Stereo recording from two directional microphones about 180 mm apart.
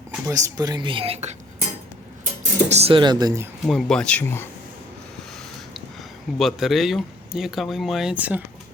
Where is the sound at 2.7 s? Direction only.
35° right (ahead or behind).